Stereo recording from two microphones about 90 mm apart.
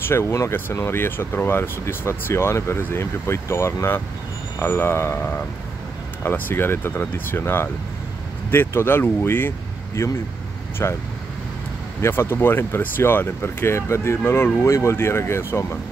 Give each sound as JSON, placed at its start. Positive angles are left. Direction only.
{"t": 0.1, "sound": "speech", "side_deg": 35}
{"t": 12.0, "sound": "speech", "side_deg": 25}